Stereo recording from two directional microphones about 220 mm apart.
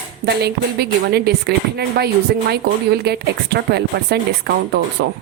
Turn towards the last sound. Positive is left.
turn(degrees=-50)  # may be behind; listen again after turning